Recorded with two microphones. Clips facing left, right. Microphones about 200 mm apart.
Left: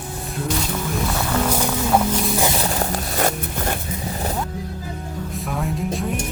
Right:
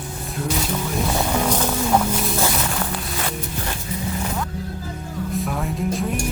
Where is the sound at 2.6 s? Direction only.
40° left (ahead or behind).